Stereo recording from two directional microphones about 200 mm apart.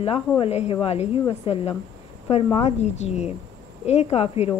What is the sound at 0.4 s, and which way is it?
A woman's voice, 30° left (ahead or behind).